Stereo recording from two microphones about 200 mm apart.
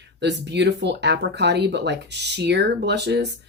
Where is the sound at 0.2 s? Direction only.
60° right (ahead or behind).